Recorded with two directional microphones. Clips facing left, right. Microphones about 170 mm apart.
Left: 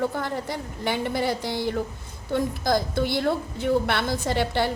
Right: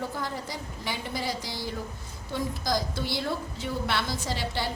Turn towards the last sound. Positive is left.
turn(degrees=55)  # may be behind; listen again after turning